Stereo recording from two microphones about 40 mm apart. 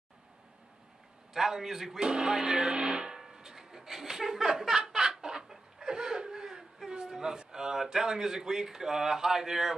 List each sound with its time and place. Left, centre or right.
1.3 s speech: centre
2.0 s speech: centre
3.2 s a sound: centre